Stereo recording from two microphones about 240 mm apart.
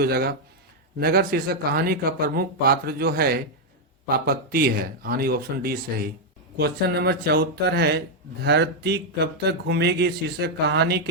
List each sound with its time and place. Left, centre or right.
0.0 s speech: right